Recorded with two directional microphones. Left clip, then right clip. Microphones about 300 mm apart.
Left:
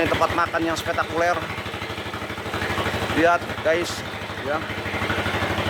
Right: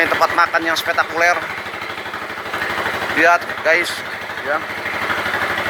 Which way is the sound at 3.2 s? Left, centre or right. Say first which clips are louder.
Right 6 dB; centre.